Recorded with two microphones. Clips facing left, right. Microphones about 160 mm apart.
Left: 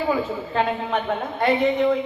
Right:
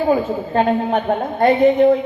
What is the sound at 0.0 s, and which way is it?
A woman's voice, 40° right (ahead or behind).